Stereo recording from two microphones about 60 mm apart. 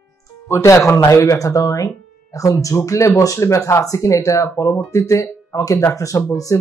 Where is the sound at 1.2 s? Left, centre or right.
Left.